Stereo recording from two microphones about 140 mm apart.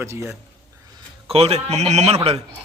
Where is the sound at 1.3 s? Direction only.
45° right (ahead or behind).